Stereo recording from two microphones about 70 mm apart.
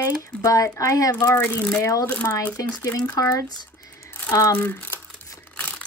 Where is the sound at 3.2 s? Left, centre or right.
Left.